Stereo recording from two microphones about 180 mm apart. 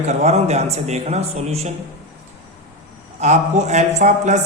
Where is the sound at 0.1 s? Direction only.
40° right (ahead or behind).